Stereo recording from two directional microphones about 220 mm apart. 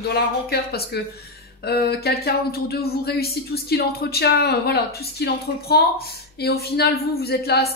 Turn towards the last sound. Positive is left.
turn(degrees=45)  # may be behind; listen again after turning